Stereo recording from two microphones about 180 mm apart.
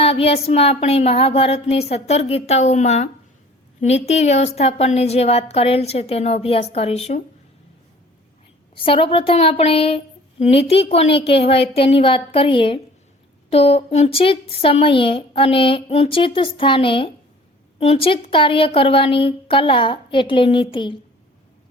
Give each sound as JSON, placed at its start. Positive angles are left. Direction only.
{"t": 0.0, "sound": "a woman's voice", "side_deg": 30}
{"t": 8.8, "sound": "a woman's voice", "side_deg": 30}